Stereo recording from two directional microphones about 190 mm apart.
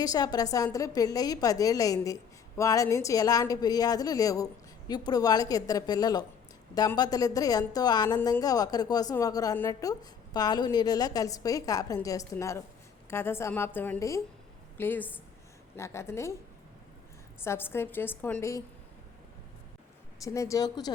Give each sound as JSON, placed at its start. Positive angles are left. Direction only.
{"t": 0.0, "sound": "a woman's voice", "side_deg": 20}
{"t": 17.4, "sound": "a woman's voice", "side_deg": 15}
{"t": 20.2, "sound": "a woman's voice", "side_deg": 15}